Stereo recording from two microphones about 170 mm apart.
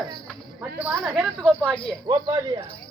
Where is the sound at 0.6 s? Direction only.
10° right (ahead or behind).